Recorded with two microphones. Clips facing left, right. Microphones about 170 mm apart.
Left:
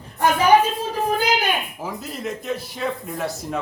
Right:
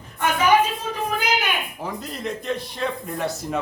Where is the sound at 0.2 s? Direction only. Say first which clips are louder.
Left 3 dB; 35° left (ahead or behind).